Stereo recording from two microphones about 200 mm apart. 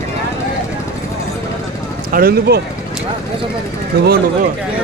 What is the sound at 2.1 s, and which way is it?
Speech, 50° right (ahead or behind).